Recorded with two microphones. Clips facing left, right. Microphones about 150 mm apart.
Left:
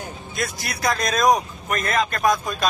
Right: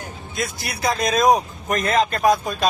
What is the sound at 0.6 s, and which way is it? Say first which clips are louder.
Speech: right 2 dB; 30° right (ahead or behind).